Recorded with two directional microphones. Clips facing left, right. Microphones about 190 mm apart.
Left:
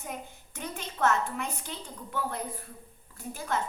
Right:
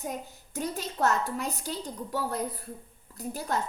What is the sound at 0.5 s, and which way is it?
A woman's voice, 35° right (ahead or behind).